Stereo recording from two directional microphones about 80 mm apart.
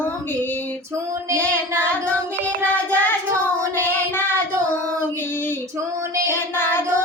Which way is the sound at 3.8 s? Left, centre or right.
Left.